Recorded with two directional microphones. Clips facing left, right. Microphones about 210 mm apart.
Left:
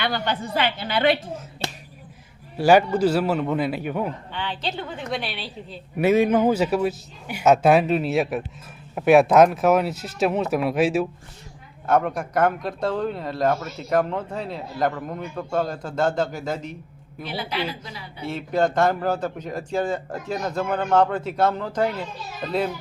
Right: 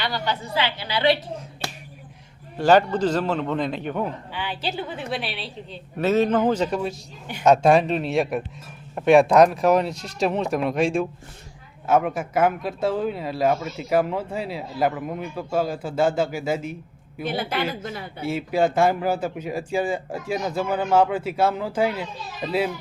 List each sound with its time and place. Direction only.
0.0 s a woman's voice: 55° left (ahead or behind)
1.6 s finger snapping: 25° left (ahead or behind)
2.6 s a man's voice: 10° left (ahead or behind)
4.3 s a woman's voice: 10° right (ahead or behind)
6.0 s a man's voice: 10° left (ahead or behind); by 16.7 s 10° right (ahead or behind)
17.2 s a woman's voice: 50° right (ahead or behind)
18.2 s speech: 10° right (ahead or behind)